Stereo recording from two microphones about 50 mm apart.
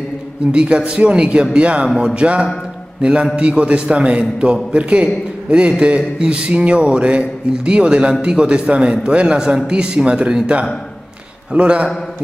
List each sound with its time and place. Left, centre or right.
0.5 s a man's voice: centre
2.0 s a man's voice: centre